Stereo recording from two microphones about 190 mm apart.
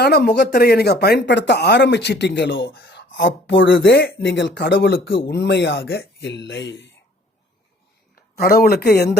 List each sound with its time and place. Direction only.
0.0 s speech: 60° left (ahead or behind)
3.2 s speech: 70° left (ahead or behind)
8.1 s speech: 50° left (ahead or behind)